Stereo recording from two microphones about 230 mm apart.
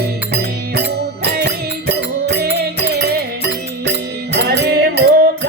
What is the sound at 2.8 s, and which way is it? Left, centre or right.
Music, right.